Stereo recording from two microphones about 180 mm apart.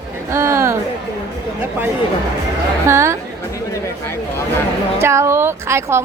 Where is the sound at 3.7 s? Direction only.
15° left (ahead or behind).